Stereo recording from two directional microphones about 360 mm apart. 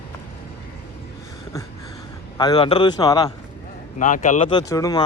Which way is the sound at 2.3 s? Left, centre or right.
Centre.